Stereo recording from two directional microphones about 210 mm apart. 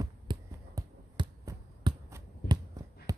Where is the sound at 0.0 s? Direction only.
20° right (ahead or behind).